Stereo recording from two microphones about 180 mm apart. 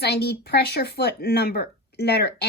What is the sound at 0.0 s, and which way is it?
Speech, 65° left (ahead or behind).